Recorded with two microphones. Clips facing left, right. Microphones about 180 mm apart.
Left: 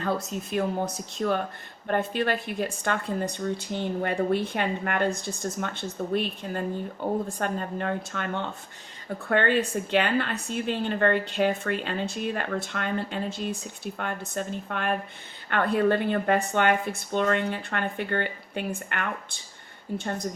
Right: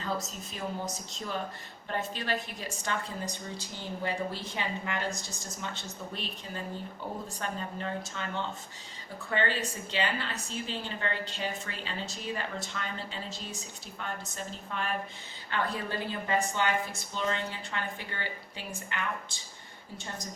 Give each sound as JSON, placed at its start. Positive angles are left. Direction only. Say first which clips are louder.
{"t": 0.0, "sound": "a woman's voice", "louder": "left 6 dB", "side_deg": 60}